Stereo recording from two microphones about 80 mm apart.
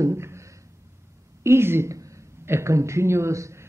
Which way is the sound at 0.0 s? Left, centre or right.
Right.